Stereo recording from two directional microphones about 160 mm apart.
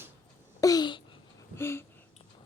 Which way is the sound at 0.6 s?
25° left (ahead or behind).